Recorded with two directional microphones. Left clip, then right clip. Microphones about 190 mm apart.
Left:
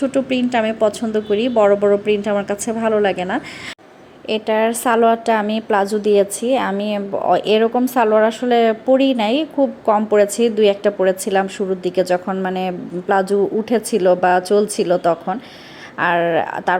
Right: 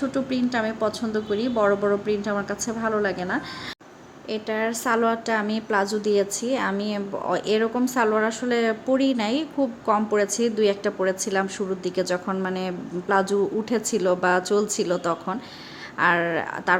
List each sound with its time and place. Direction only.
0.6 s a woman's voice: 5° left (ahead or behind)
1.5 s a woman's voice: 20° left (ahead or behind)
4.3 s a woman's voice: 20° left (ahead or behind)